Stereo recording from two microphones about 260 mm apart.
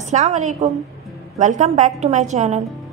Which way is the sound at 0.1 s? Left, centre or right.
Right.